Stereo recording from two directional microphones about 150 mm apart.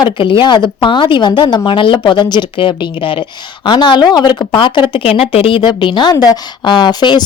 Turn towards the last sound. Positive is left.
turn(degrees=30)  # may be behind; listen again after turning